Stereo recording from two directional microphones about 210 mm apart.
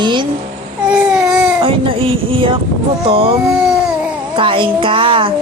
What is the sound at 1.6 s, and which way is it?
Speech, 25° right (ahead or behind).